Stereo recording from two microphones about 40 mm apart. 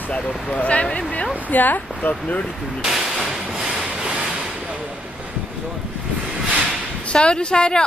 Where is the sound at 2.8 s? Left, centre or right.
Centre.